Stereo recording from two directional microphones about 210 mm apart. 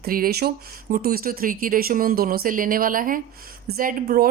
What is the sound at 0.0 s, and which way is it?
Speech, 45° right (ahead or behind).